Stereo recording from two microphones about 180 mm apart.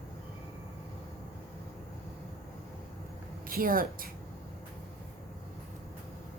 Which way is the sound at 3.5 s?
50° right (ahead or behind).